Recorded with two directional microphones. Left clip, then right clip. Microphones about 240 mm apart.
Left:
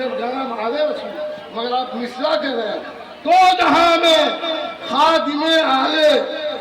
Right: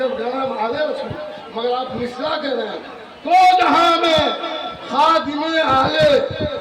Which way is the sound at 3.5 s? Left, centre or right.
Left.